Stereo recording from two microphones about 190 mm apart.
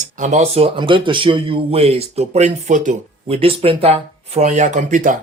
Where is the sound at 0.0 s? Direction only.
40° right (ahead or behind).